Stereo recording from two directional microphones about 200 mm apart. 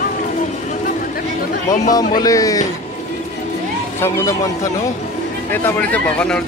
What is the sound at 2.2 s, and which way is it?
Speech, 15° left (ahead or behind).